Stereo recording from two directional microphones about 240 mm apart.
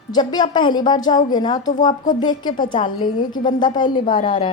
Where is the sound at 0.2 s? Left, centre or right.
Centre.